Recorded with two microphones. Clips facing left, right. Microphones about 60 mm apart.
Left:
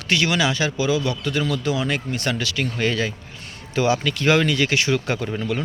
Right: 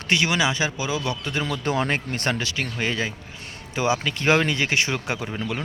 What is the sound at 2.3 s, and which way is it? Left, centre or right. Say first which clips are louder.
A man's voice: left 3 dB; right.